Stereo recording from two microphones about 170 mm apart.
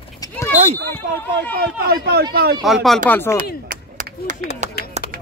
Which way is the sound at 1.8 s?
70° right (ahead or behind).